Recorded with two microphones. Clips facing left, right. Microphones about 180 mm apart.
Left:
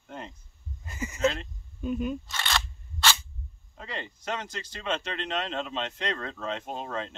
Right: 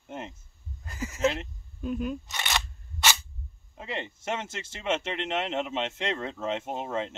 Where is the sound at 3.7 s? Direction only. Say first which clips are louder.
Right 3 dB; 20° right (ahead or behind).